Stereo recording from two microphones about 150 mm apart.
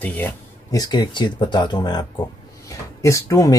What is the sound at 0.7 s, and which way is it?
Speech, 25° left (ahead or behind).